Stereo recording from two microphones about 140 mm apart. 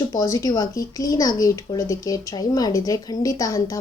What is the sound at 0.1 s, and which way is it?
Speech, 25° left (ahead or behind).